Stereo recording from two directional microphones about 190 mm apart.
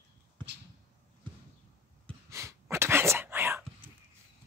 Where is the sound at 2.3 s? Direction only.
15° right (ahead or behind).